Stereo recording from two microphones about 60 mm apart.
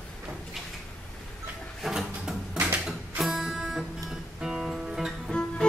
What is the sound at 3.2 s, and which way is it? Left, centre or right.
Music, centre.